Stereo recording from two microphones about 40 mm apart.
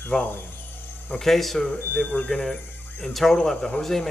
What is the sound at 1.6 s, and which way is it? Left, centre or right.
Speech, left.